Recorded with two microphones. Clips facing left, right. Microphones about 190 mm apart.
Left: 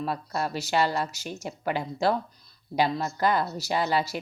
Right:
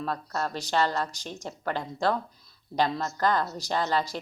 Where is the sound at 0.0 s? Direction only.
10° left (ahead or behind).